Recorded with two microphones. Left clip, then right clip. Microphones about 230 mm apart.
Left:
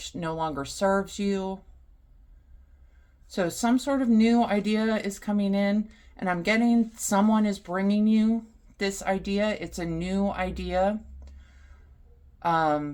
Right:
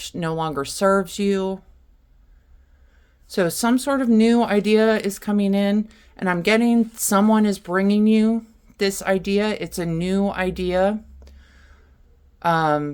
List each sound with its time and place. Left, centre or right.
0.0 s speech: right
3.2 s speech: right
12.4 s speech: right